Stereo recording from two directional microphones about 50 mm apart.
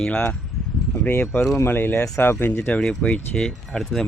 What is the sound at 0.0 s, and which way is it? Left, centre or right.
Speech, centre.